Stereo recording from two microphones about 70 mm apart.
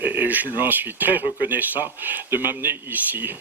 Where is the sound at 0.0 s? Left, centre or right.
Right.